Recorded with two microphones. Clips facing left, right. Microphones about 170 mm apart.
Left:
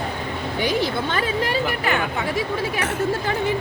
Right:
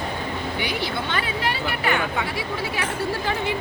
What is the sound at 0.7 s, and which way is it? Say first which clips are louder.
Speech: left 4 dB; 40° left (ahead or behind).